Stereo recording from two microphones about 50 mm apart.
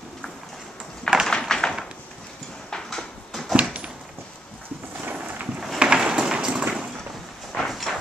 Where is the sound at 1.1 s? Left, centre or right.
Centre.